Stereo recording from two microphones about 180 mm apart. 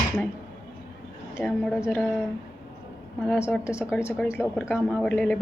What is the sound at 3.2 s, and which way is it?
Speech, 15° left (ahead or behind).